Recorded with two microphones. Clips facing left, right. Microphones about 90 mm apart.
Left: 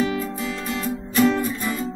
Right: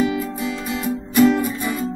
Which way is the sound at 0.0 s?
15° right (ahead or behind).